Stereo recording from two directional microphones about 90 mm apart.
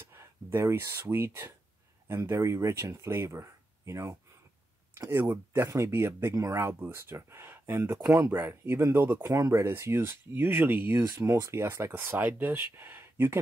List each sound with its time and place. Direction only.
0.1 s speech: 30° right (ahead or behind)
6.7 s speech: 25° right (ahead or behind)